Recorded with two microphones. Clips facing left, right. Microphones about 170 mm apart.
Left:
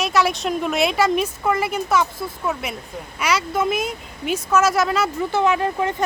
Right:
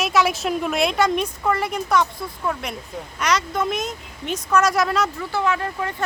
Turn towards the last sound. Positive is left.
turn(degrees=20)  # may be behind; listen again after turning